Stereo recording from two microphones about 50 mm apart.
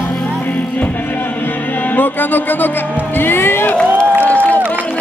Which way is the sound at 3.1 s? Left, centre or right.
Left.